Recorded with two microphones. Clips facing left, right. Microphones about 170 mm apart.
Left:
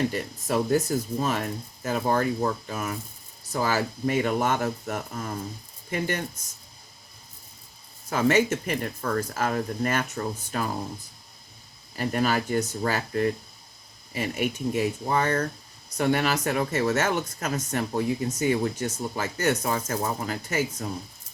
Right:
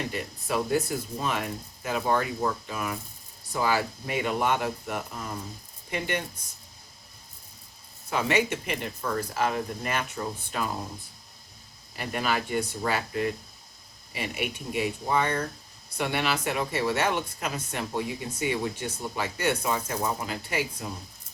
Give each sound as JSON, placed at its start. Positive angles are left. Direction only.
{"t": 0.1, "sound": "speech", "side_deg": 40}
{"t": 8.1, "sound": "speech", "side_deg": 45}
{"t": 11.9, "sound": "speech", "side_deg": 40}